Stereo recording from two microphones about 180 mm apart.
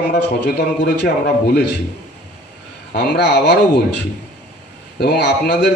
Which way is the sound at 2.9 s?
65° left (ahead or behind).